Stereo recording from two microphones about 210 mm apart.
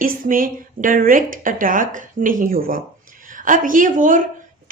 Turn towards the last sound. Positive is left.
turn(degrees=-40)  # may be behind; listen again after turning